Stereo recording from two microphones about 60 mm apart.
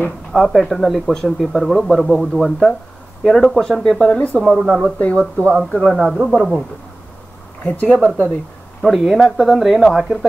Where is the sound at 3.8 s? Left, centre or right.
Centre.